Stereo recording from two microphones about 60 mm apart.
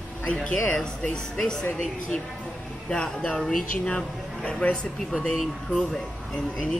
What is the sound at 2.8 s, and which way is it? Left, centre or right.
A woman's voice, centre.